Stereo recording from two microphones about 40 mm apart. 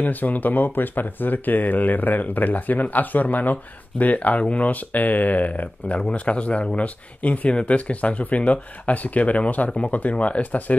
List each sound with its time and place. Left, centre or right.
0.0 s speech: left